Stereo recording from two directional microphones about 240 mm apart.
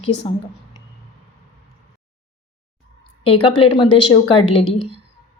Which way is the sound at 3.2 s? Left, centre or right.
Left.